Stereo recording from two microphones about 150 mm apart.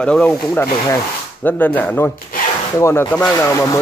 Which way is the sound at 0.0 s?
10° left (ahead or behind).